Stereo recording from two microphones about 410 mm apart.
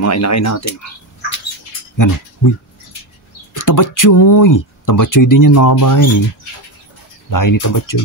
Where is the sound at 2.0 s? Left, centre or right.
Left.